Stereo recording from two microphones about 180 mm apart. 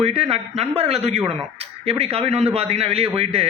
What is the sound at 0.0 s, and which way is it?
A man's voice, 35° right (ahead or behind).